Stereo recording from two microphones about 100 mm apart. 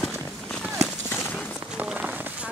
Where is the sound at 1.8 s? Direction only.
10° right (ahead or behind).